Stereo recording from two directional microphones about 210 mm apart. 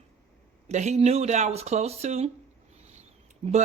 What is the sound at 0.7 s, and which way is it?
A woman's voice, 30° right (ahead or behind).